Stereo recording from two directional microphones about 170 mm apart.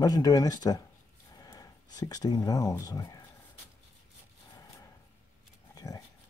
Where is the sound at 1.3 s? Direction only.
20° left (ahead or behind).